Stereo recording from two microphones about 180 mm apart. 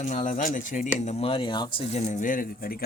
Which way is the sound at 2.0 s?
45° left (ahead or behind).